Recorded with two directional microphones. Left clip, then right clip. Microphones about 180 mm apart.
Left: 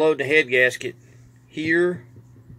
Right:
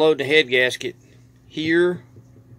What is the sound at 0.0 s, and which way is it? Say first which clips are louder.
Speech: right 2 dB; 20° right (ahead or behind).